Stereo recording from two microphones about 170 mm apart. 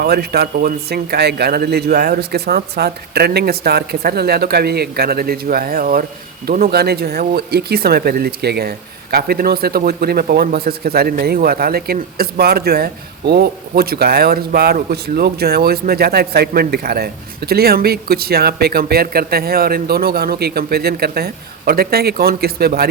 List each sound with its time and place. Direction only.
0.0 s speech: 70° right (ahead or behind)